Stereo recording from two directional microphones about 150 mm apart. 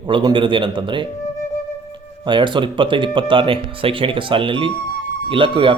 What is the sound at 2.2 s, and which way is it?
Speech, 30° right (ahead or behind).